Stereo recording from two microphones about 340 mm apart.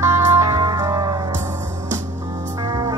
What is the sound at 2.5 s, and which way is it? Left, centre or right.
Music, centre.